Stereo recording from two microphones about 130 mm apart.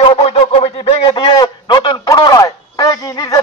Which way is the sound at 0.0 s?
50° left (ahead or behind).